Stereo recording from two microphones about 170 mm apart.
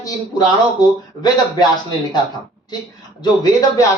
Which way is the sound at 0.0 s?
25° left (ahead or behind).